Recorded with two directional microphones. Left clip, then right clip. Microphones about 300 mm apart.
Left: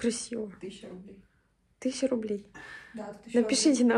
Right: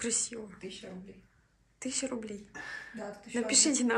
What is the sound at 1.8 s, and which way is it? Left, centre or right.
Speech, centre.